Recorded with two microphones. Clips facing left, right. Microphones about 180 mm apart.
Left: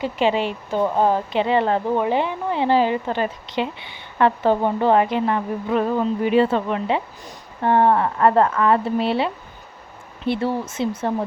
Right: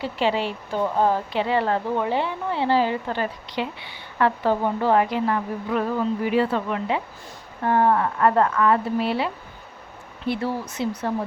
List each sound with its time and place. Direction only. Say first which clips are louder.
0.0 s speech: left 3 dB; 20° left (ahead or behind)